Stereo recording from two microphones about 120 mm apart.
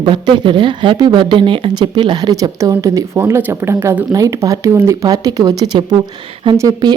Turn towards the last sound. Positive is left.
turn(degrees=-35)  # may be behind; listen again after turning